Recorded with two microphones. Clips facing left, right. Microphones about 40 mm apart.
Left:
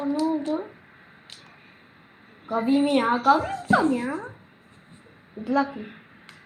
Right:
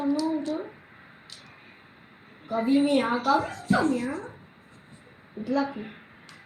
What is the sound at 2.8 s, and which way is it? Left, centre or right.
Speech, centre.